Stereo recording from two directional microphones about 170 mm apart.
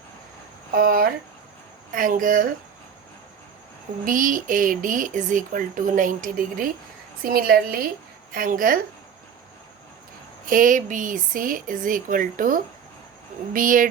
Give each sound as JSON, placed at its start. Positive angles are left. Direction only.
{"t": 0.7, "sound": "a sound", "side_deg": -60}
{"t": 1.9, "sound": "speech", "side_deg": -50}
{"t": 4.0, "sound": "a woman's voice", "side_deg": -50}
{"t": 10.4, "sound": "speech", "side_deg": -50}